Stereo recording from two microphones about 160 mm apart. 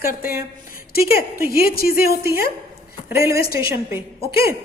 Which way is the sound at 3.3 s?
70° left (ahead or behind).